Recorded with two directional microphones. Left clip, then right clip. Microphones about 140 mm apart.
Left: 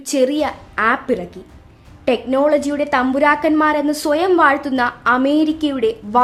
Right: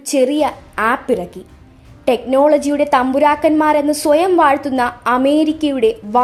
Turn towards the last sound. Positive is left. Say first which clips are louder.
# right 3 dB
turn(degrees=-15)  # may be behind; listen again after turning